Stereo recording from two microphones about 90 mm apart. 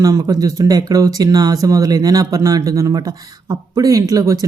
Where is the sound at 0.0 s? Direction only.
35° right (ahead or behind).